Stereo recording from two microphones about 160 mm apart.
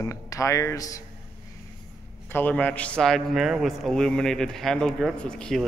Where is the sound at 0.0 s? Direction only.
20° left (ahead or behind).